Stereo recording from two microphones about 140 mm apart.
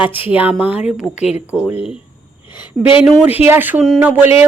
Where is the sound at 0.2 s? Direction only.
10° right (ahead or behind).